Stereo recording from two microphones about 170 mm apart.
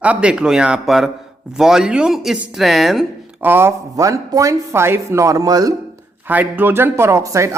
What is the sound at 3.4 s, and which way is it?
Speech, 10° right (ahead or behind).